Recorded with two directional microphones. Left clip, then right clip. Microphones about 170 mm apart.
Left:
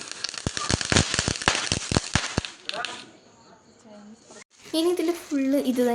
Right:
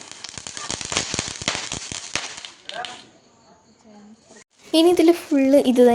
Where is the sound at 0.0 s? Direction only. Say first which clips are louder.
Left 4 dB; 5° left (ahead or behind).